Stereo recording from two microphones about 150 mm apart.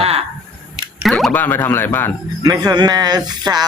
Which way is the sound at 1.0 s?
Centre (ahead or behind).